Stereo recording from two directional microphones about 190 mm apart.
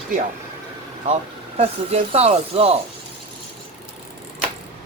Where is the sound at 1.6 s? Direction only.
35° right (ahead or behind).